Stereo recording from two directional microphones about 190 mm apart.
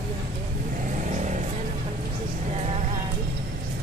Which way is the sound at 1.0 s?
40° right (ahead or behind).